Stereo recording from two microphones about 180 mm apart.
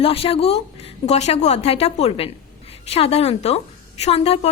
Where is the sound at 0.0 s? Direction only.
30° left (ahead or behind).